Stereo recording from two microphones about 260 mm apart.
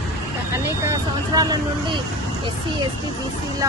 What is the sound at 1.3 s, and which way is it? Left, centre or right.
Speech, centre.